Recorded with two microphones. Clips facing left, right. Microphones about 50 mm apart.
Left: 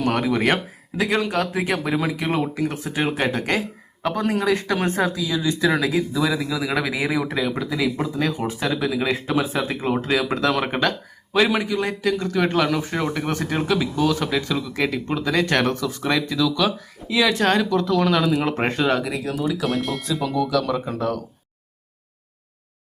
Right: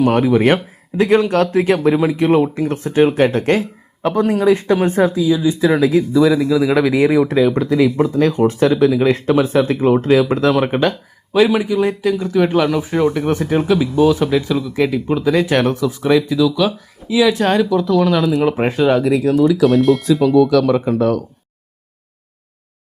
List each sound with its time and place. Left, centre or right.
0.0 s a man's voice: centre
1.9 s speech: centre
4.2 s a man's voice: centre
5.0 s speech: right
5.3 s a man's voice: centre